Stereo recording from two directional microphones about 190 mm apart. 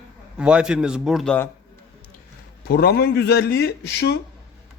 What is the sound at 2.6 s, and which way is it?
A man's voice, 55° left (ahead or behind).